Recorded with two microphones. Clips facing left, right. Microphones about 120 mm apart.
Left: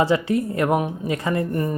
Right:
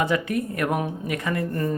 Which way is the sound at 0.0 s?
30° left (ahead or behind).